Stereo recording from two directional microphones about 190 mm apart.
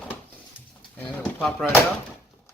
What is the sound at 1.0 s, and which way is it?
Speech, 10° left (ahead or behind).